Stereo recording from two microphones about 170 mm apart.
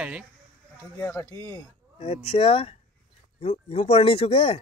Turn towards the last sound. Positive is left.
turn(degrees=35)  # may be behind; listen again after turning